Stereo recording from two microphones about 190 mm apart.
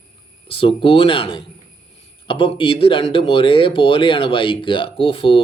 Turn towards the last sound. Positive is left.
turn(degrees=30)  # may be behind; listen again after turning